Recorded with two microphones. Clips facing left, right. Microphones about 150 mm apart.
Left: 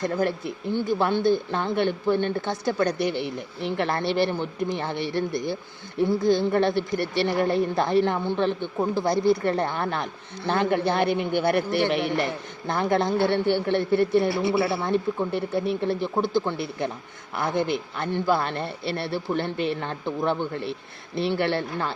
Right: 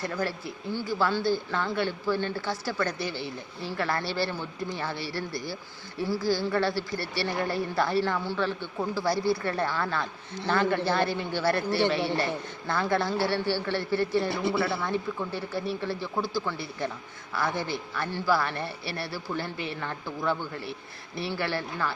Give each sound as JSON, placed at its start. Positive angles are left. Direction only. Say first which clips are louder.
{"t": 0.0, "sound": "a woman's voice", "louder": "left 6 dB", "side_deg": 20}